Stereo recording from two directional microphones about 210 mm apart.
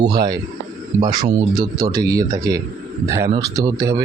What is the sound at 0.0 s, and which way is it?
Speech, 20° right (ahead or behind).